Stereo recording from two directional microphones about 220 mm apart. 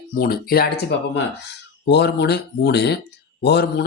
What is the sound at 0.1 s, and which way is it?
A man's voice, 40° left (ahead or behind).